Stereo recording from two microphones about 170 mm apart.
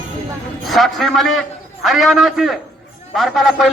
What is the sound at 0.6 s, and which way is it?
A man's voice, centre (ahead or behind).